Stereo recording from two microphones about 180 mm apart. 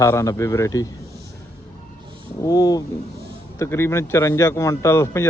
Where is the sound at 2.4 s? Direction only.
20° left (ahead or behind).